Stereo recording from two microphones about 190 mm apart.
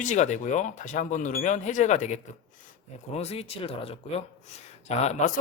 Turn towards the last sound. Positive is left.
turn(degrees=35)  # may be behind; listen again after turning